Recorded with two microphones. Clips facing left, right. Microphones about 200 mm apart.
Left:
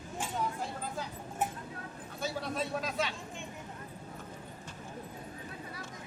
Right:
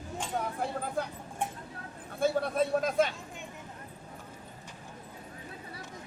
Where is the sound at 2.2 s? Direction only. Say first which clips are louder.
Right 8 dB; 55° right (ahead or behind).